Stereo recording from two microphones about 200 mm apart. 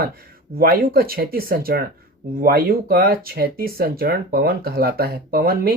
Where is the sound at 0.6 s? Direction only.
45° right (ahead or behind).